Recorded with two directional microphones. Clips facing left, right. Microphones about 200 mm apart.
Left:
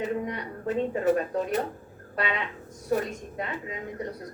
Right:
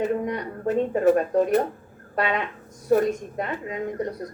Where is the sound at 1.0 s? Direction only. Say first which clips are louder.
Right 7 dB; 50° right (ahead or behind).